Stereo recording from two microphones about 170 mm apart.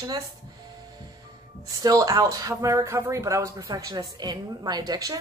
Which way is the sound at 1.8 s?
20° right (ahead or behind).